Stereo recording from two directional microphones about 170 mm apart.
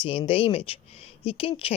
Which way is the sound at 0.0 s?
30° left (ahead or behind).